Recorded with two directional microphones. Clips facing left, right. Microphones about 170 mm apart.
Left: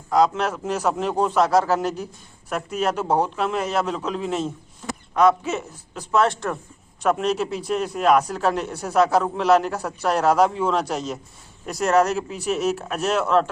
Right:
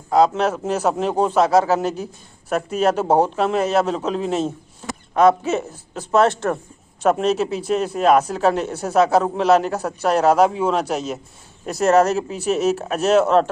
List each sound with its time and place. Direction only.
0.1 s speech: 25° right (ahead or behind)